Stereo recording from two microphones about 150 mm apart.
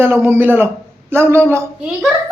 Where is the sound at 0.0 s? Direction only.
15° right (ahead or behind).